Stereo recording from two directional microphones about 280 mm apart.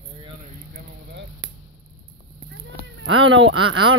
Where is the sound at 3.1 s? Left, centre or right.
Right.